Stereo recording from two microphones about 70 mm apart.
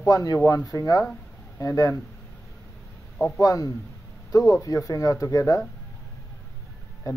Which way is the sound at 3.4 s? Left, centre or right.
Left.